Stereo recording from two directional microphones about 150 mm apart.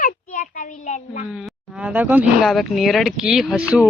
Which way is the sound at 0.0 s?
60° left (ahead or behind).